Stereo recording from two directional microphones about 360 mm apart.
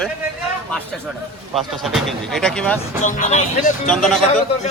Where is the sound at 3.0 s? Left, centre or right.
Left.